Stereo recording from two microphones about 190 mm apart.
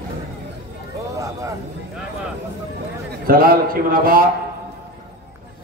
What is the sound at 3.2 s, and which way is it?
A man's voice, 50° right (ahead or behind).